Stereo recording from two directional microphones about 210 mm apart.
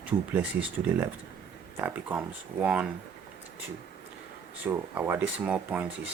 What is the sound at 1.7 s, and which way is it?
Speech, 10° right (ahead or behind).